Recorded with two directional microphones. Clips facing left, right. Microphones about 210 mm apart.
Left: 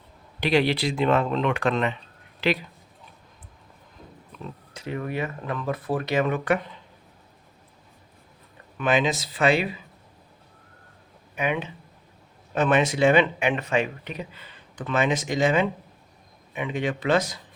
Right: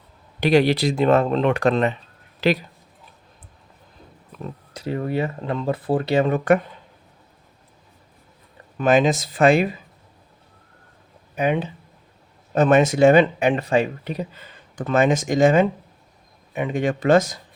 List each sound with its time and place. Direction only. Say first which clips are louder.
0.3 s speech: right 5 dB; 45° right (ahead or behind)
4.7 s speech: right 6 dB; 35° right (ahead or behind)
8.8 s speech: right 6 dB; 45° right (ahead or behind)
11.3 s speech: right 5 dB; 35° right (ahead or behind)